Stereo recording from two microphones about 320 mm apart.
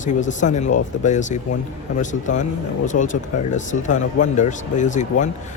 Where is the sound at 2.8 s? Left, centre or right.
Left.